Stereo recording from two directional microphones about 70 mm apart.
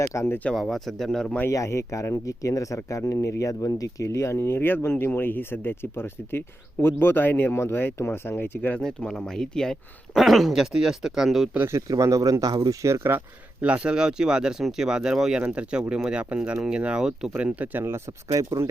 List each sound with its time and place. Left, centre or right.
0.3 s speech: left
0.5 s speech: centre
1.5 s speech: left
8.8 s speech: centre
11.9 s speech: right
12.8 s speech: right
13.6 s speech: centre
17.3 s speech: right
18.3 s speech: right